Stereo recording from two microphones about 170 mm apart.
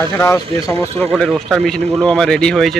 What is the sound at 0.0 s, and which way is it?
Speech, 20° left (ahead or behind).